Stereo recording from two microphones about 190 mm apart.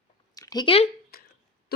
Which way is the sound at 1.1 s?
50° left (ahead or behind).